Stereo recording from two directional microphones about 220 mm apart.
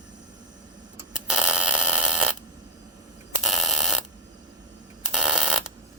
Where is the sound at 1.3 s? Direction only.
5° right (ahead or behind).